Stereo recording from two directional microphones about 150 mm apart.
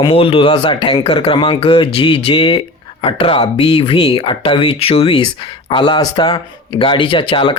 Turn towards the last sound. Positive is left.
turn(degrees=35)  # may be behind; listen again after turning